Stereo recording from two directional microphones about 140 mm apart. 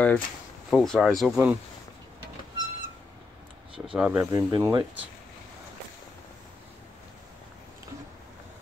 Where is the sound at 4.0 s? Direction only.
5° right (ahead or behind).